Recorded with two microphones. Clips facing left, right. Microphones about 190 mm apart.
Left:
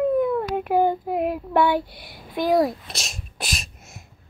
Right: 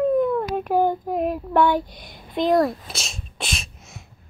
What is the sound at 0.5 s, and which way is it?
Child singing, 15° left (ahead or behind).